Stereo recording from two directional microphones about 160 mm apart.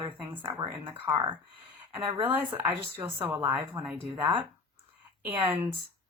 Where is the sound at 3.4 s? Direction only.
30° right (ahead or behind).